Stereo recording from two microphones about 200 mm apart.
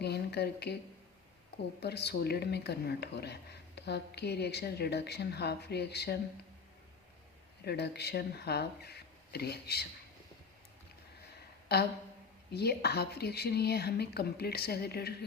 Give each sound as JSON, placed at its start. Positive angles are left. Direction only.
{"t": 0.0, "sound": "a sound", "side_deg": 55}
{"t": 1.8, "sound": "a woman's voice", "side_deg": 55}
{"t": 7.6, "sound": "speech", "side_deg": 55}
{"t": 11.7, "sound": "a woman's voice", "side_deg": 55}